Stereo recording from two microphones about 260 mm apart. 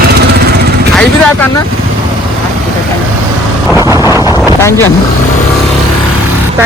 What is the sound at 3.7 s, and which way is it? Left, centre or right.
Vehicle, centre.